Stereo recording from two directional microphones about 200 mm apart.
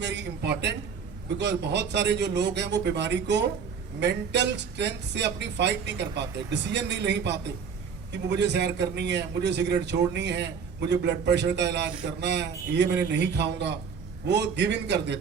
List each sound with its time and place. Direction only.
0.0 s a man's voice: 60° right (ahead or behind)